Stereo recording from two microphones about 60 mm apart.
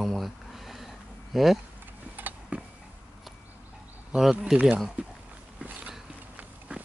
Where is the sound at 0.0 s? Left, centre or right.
Centre.